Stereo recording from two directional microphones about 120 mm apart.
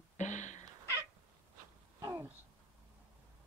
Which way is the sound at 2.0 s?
30° right (ahead or behind).